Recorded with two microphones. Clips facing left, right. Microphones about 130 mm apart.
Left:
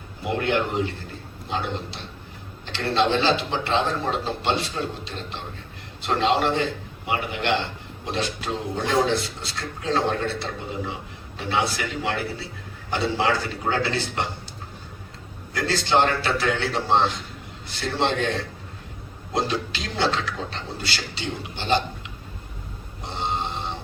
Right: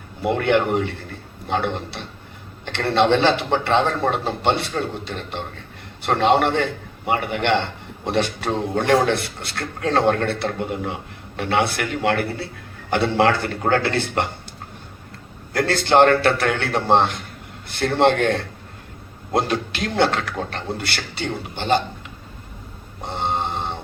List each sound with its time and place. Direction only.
0.2 s a man's voice: 60° right (ahead or behind)
15.5 s a man's voice: 55° right (ahead or behind)
23.0 s a sound: 55° right (ahead or behind)